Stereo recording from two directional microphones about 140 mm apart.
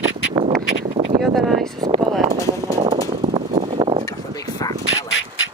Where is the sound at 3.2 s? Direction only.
55° right (ahead or behind); by 4.0 s 40° right (ahead or behind).